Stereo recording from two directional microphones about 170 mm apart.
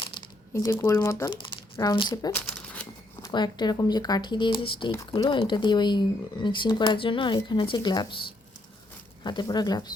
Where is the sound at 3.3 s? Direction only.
25° left (ahead or behind).